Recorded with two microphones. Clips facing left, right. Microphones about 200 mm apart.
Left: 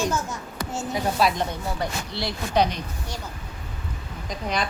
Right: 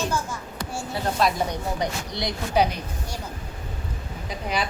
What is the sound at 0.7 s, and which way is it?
Speech, 15° left (ahead or behind).